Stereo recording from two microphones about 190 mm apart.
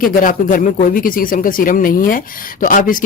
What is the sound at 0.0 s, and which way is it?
Speech, 45° left (ahead or behind).